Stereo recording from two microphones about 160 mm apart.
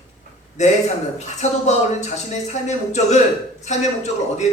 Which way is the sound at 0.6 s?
45° left (ahead or behind).